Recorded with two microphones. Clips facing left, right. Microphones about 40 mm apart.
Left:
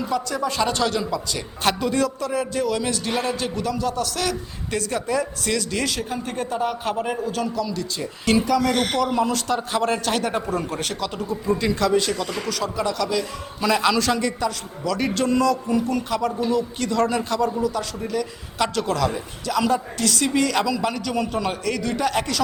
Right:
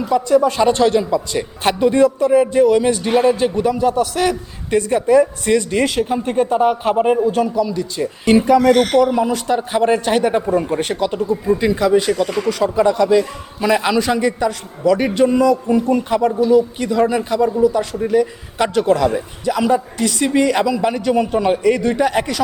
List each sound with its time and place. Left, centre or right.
0.1 s a man's voice: centre
9.0 s a man's voice: centre